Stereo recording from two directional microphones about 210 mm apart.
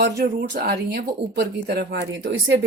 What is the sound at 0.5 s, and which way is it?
Speech, 50° right (ahead or behind).